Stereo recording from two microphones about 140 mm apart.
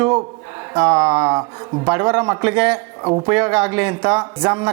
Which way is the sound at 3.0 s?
30° right (ahead or behind).